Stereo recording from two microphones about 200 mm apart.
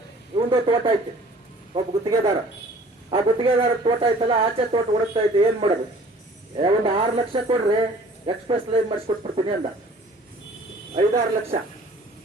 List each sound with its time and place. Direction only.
0.3 s speech: 25° right (ahead or behind)
10.9 s speech: 30° right (ahead or behind)